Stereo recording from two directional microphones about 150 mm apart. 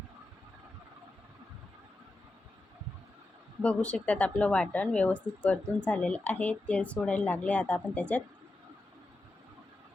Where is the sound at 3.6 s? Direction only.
10° left (ahead or behind).